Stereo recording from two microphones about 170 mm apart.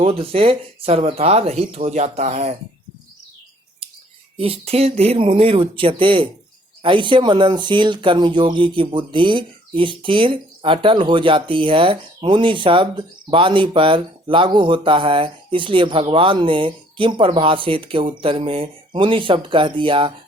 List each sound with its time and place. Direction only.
0.0 s speech: 35° right (ahead or behind)
4.4 s speech: 35° right (ahead or behind)